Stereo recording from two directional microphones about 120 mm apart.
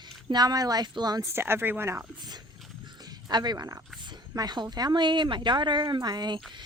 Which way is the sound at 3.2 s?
35° right (ahead or behind).